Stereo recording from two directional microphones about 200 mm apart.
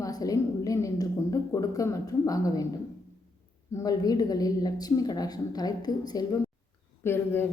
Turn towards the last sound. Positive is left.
turn(degrees=10)  # may be behind; listen again after turning